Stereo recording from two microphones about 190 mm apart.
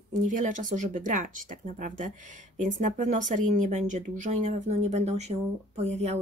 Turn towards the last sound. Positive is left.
turn(degrees=-35)  # may be behind; listen again after turning